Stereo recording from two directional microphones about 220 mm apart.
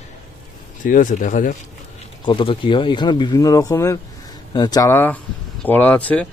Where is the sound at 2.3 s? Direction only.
20° left (ahead or behind); by 6.3 s 5° left (ahead or behind).